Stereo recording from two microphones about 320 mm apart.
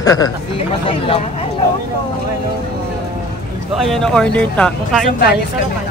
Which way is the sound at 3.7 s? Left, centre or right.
Centre.